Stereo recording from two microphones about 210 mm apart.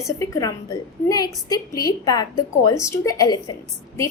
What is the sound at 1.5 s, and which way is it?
A woman's voice, 15° left (ahead or behind).